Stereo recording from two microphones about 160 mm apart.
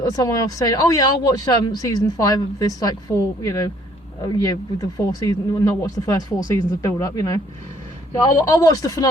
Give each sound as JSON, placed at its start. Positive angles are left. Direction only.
{"t": 0.0, "sound": "speech", "side_deg": 20}